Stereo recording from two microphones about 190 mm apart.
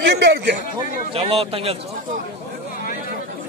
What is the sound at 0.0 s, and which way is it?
Speech, 65° right (ahead or behind).